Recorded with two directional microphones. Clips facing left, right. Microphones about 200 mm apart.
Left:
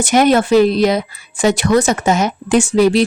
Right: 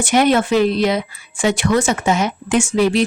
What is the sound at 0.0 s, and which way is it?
A woman's voice, 40° left (ahead or behind).